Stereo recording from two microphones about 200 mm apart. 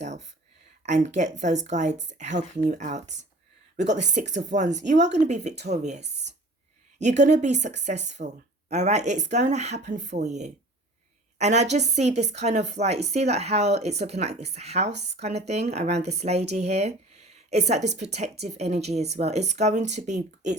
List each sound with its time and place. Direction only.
0.0 s a sound: 35° right (ahead or behind)
0.8 s speech: 35° right (ahead or behind)
6.1 s speech: 60° right (ahead or behind)
7.0 s speech: 35° right (ahead or behind)
14.9 s speech: 55° right (ahead or behind)
15.2 s speech: 35° right (ahead or behind)